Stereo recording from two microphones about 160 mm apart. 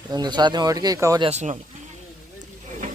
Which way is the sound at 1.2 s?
45° right (ahead or behind).